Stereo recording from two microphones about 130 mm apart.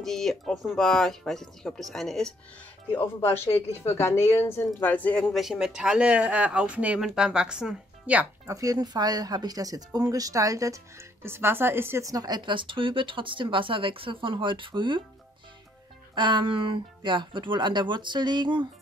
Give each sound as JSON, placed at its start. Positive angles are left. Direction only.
{"t": 0.0, "sound": "speech", "side_deg": 5}
{"t": 3.2, "sound": "a woman's voice", "side_deg": 20}
{"t": 5.3, "sound": "speech", "side_deg": -5}
{"t": 8.5, "sound": "speech", "side_deg": -25}
{"t": 16.2, "sound": "speech", "side_deg": -40}